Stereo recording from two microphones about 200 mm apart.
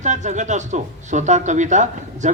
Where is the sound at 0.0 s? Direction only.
35° right (ahead or behind).